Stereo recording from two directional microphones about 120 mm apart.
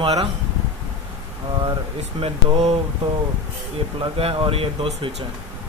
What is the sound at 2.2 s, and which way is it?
Speech, 55° right (ahead or behind).